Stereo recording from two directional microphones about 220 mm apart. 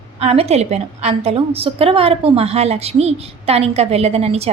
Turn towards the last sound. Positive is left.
turn(degrees=-30)  # may be behind; listen again after turning